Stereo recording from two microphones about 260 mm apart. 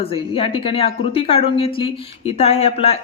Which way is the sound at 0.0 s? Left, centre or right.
Left.